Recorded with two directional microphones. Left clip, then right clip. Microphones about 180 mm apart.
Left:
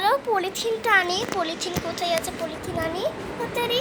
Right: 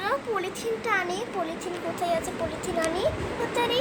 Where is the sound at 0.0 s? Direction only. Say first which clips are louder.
Left 6 dB; 40° left (ahead or behind).